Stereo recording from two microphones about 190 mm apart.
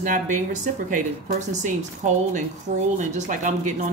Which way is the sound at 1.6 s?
40° right (ahead or behind).